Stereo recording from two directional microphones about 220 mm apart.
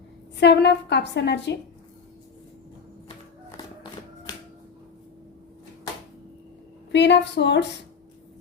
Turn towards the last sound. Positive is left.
turn(degrees=50)  # may be behind; listen again after turning